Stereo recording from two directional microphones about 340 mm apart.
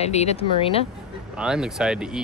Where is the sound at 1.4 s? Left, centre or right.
Centre.